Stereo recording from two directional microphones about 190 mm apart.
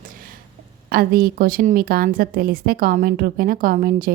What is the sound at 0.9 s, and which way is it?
A woman's voice, 50° right (ahead or behind).